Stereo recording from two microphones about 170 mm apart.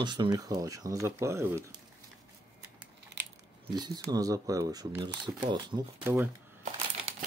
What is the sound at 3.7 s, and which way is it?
Speech, 25° right (ahead or behind).